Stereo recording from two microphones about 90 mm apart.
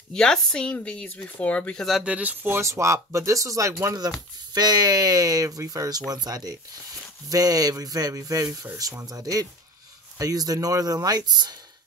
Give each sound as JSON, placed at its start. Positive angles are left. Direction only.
{"t": 0.1, "sound": "a woman's voice", "side_deg": 5}
{"t": 2.0, "sound": "speech", "side_deg": -15}